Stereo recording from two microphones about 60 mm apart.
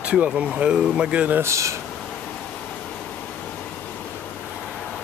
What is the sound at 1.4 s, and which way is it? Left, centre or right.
Speech, right.